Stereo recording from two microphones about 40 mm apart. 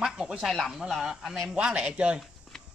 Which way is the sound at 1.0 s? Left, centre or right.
Centre.